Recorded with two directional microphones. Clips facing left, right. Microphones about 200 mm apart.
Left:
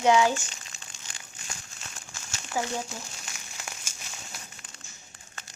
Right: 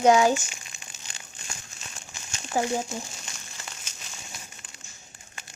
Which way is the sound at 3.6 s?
10° left (ahead or behind).